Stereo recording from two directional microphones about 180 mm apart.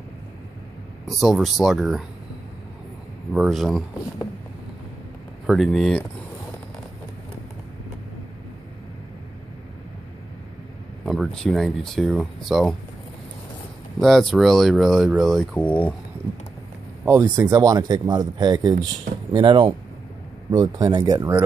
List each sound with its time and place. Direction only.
1.0 s speech: centre (ahead or behind)
3.3 s speech: centre (ahead or behind)
5.5 s speech: centre (ahead or behind)
11.1 s speech: centre (ahead or behind)
13.9 s speech: centre (ahead or behind)
17.0 s speech: 15° right (ahead or behind)